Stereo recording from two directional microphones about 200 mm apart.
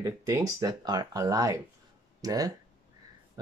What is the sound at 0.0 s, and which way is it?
Speech, 15° right (ahead or behind).